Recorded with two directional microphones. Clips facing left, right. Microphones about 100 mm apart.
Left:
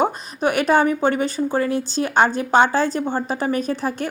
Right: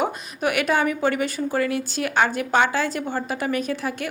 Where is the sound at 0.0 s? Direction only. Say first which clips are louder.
Left 4 dB; 30° left (ahead or behind).